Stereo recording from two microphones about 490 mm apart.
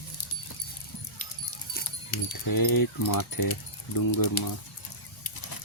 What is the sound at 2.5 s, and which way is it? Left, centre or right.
Speech, left.